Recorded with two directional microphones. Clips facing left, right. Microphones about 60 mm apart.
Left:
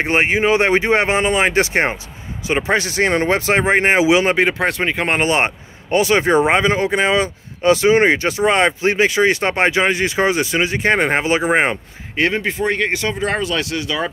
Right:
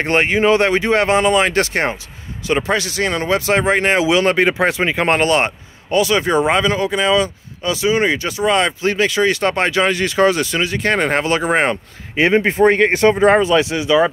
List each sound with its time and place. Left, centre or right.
0.0 s speech: centre
4.4 s speech: centre
5.2 s speech: left
12.2 s speech: centre
12.4 s speech: right
13.3 s speech: right